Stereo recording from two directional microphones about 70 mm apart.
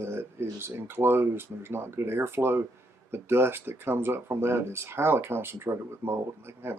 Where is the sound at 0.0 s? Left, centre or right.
Right.